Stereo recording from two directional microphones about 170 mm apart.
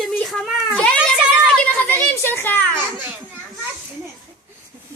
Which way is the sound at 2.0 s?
10° left (ahead or behind).